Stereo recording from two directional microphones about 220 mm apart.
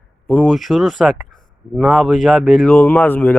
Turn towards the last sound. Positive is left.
turn(degrees=10)  # may be behind; listen again after turning